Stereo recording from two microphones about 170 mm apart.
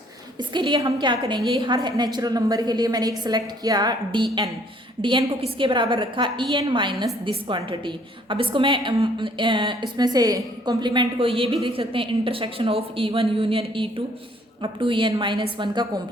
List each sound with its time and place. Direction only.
0.3 s a woman's voice: 25° right (ahead or behind)